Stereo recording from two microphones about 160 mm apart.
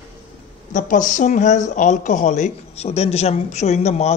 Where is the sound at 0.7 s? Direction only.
50° left (ahead or behind).